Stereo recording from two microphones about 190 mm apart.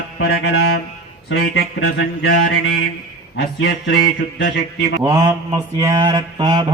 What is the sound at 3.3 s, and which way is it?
Mantra, 55° left (ahead or behind).